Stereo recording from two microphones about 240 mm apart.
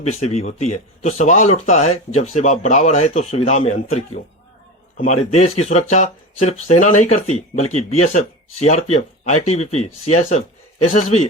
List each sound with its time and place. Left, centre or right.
0.0 s speech: left